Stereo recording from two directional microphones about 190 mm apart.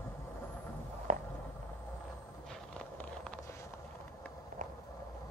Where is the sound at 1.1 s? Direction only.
40° right (ahead or behind).